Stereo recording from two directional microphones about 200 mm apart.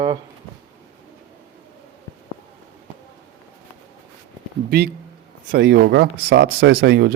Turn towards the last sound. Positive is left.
turn(degrees=-55)  # may be behind; listen again after turning